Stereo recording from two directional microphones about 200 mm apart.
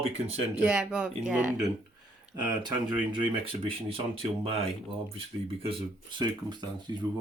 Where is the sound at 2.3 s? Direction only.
20° right (ahead or behind).